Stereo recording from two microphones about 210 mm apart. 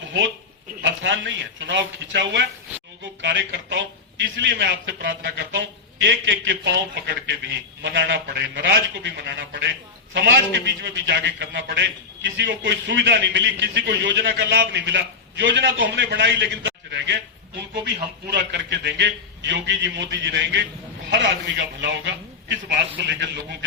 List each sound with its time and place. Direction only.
0.8 s a man's voice: 60° right (ahead or behind)
18.3 s a man's voice: 50° right (ahead or behind)